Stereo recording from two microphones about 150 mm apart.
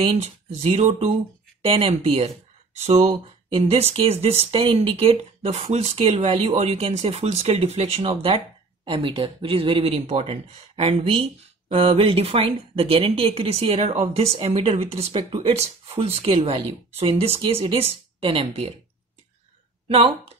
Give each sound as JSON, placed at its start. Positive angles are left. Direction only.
{"t": 0.0, "sound": "speech", "side_deg": -45}
{"t": 19.9, "sound": "speech", "side_deg": -40}